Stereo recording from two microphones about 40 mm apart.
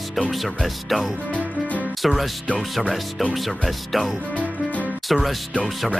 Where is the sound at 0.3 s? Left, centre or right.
Centre.